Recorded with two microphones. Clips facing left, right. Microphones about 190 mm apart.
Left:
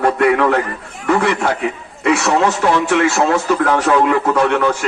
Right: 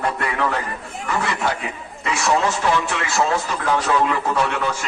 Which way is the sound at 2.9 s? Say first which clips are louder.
Left 7 dB; 60° left (ahead or behind).